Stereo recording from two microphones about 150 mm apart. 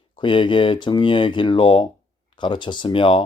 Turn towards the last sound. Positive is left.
turn(degrees=35)  # may be behind; listen again after turning